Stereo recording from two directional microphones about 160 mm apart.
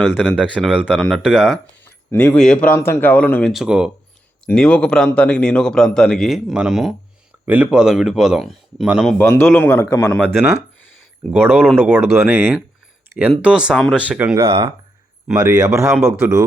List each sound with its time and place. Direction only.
0.2 s a man's voice: 5° right (ahead or behind)
1.8 s speech: 10° left (ahead or behind)
3.5 s a man's voice: 5° right (ahead or behind)
4.4 s a man's voice: 5° left (ahead or behind)
9.1 s speech: 10° left (ahead or behind)
11.3 s a man's voice: 10° right (ahead or behind)
15.4 s speech: 20° right (ahead or behind)